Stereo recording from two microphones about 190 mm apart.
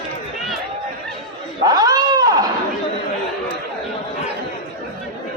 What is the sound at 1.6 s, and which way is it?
Cat, 20° right (ahead or behind).